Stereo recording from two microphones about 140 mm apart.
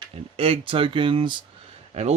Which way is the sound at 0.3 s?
40° right (ahead or behind).